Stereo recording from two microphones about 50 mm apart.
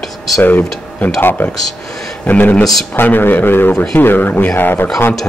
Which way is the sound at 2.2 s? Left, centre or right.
Left.